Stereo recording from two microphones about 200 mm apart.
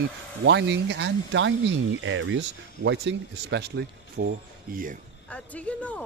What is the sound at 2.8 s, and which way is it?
Speech, 60° right (ahead or behind).